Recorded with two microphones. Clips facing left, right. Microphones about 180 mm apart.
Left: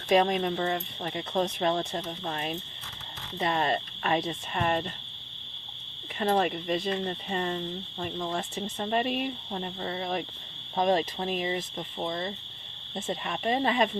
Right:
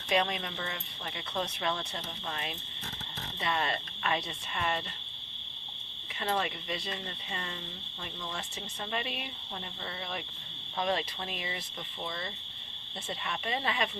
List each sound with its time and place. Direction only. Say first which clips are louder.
0.1 s speech: left 7 dB; 45° left (ahead or behind)
6.1 s speech: left 7 dB; 45° left (ahead or behind)
13.1 s speech: left 7 dB; 45° left (ahead or behind)